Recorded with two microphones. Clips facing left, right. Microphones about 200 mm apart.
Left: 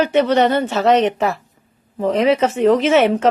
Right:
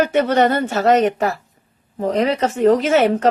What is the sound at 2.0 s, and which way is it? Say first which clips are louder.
Speech: left 3 dB; 35° right (ahead or behind).